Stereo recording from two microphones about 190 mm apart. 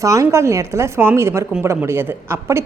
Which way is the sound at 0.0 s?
15° right (ahead or behind).